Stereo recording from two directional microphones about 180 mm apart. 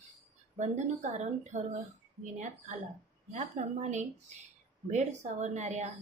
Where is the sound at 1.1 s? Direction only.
45° right (ahead or behind).